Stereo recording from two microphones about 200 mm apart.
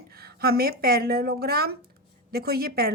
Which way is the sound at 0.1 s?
50° right (ahead or behind).